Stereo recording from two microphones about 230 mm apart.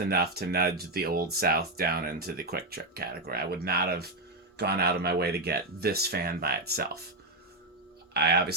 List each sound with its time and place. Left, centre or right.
0.1 s speech: right
8.1 s speech: right